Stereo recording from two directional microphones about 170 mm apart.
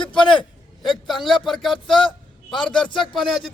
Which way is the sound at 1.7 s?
30° left (ahead or behind).